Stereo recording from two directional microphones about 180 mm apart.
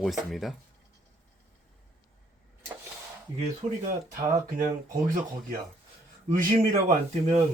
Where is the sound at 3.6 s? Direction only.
35° right (ahead or behind).